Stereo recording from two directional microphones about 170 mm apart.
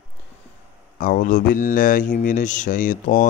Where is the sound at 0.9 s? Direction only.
55° left (ahead or behind).